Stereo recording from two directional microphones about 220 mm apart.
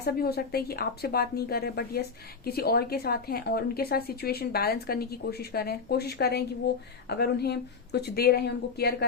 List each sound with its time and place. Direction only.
0.0 s speech: 45° left (ahead or behind)